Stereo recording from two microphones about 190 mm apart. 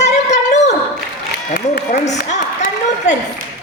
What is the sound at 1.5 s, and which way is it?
Speech, 50° left (ahead or behind).